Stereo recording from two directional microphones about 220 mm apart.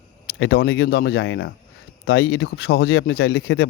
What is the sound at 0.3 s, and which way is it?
Speech, 55° left (ahead or behind).